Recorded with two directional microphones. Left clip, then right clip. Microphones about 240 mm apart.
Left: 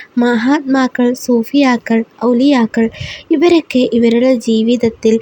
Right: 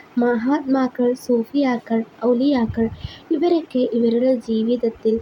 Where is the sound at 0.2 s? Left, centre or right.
Left.